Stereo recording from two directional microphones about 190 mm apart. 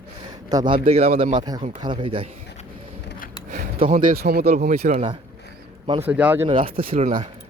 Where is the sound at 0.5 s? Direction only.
25° right (ahead or behind).